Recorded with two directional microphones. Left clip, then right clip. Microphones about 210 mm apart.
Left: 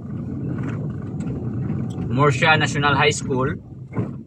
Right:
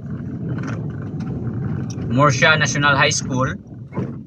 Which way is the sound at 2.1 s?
15° right (ahead or behind).